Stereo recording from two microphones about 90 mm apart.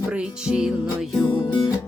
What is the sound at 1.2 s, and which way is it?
Music, 60° left (ahead or behind).